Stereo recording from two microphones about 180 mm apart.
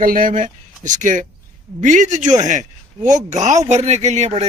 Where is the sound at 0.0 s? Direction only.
50° right (ahead or behind).